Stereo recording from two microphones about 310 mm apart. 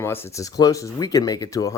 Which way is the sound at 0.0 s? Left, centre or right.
Centre.